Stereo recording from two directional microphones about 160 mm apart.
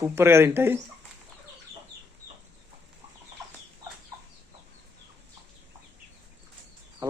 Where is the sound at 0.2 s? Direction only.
15° right (ahead or behind).